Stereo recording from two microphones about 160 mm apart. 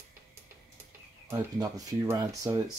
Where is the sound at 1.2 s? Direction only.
20° right (ahead or behind).